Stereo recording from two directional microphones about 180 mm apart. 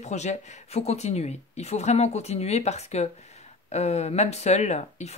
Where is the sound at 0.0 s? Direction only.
40° left (ahead or behind).